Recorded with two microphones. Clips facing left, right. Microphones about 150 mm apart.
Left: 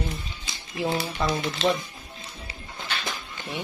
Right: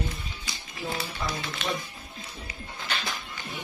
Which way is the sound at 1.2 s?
90° left.